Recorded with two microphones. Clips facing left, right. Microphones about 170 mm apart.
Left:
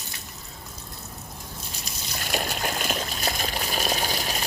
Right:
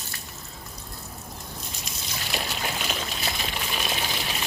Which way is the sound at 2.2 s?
50° left (ahead or behind).